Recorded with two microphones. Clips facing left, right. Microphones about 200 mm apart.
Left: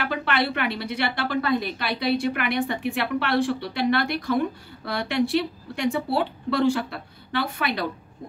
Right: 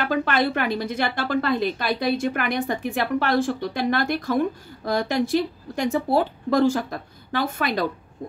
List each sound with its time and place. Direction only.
0.0 s a woman's voice: 45° right (ahead or behind)